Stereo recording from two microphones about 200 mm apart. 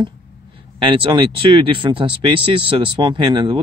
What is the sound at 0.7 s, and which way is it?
Speech, 25° right (ahead or behind).